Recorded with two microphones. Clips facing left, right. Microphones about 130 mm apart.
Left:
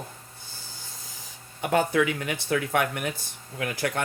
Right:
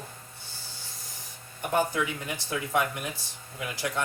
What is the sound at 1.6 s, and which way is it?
Speech, 90° left.